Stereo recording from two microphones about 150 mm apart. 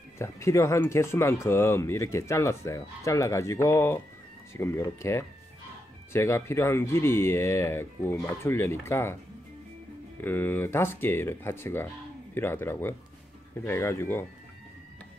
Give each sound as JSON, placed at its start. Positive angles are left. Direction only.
{"t": 0.2, "sound": "speech", "side_deg": 20}
{"t": 10.2, "sound": "speech", "side_deg": 15}